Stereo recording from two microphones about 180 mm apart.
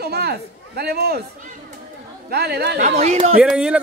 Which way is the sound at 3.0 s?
35° right (ahead or behind).